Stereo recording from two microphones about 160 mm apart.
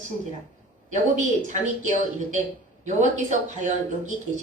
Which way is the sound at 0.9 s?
50° right (ahead or behind).